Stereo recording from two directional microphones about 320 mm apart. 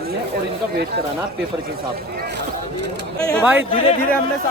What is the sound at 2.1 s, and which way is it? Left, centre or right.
Speech, right.